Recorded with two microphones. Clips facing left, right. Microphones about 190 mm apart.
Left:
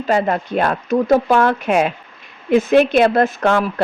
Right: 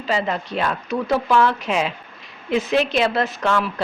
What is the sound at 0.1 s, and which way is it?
Speech, 50° left (ahead or behind).